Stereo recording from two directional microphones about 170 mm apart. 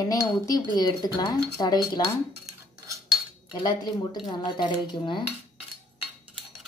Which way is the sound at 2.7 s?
20° right (ahead or behind).